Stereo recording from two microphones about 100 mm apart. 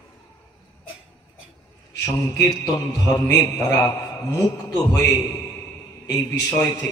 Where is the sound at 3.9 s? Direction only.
40° left (ahead or behind).